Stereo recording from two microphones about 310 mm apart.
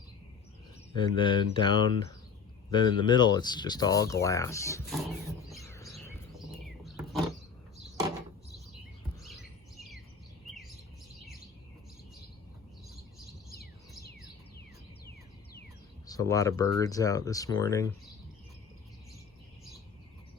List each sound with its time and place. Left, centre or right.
0.9 s speech: centre
5.5 s bird: centre
6.8 s a sound: centre
10.4 s chirp: centre
13.5 s bird: left
16.0 s speech: centre